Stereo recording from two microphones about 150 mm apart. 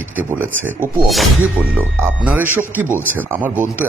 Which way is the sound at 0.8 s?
65° right (ahead or behind).